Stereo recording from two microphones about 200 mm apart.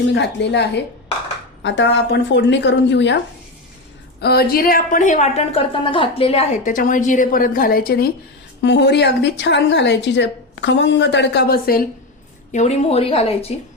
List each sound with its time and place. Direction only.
0.1 s a woman's voice: 60° left (ahead or behind)
4.2 s a woman's voice: 50° left (ahead or behind)
8.6 s a woman's voice: 60° left (ahead or behind)
12.5 s a woman's voice: 35° left (ahead or behind)